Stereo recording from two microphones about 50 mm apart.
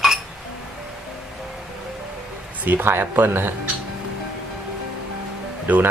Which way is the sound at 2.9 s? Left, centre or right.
Right.